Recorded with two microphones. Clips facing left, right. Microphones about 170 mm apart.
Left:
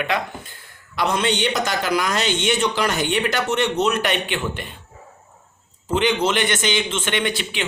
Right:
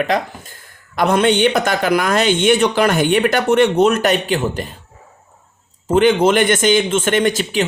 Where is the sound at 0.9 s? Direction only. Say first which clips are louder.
Right 7 dB; 55° right (ahead or behind); by 4.8 s 40° right (ahead or behind).